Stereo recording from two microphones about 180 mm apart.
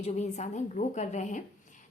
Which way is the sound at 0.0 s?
40° left (ahead or behind).